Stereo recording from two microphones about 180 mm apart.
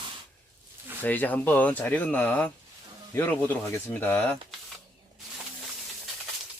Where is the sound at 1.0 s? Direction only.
10° left (ahead or behind).